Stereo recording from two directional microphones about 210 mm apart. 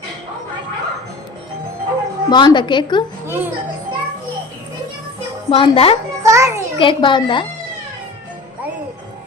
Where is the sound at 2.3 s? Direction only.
20° left (ahead or behind).